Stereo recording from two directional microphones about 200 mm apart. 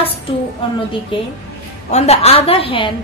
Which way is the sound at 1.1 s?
25° left (ahead or behind).